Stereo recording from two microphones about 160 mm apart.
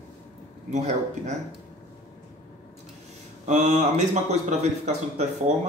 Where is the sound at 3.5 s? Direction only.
45° right (ahead or behind).